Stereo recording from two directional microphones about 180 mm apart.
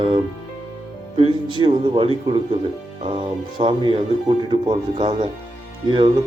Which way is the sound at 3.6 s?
25° right (ahead or behind).